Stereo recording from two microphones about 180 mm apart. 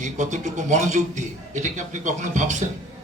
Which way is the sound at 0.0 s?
40° right (ahead or behind).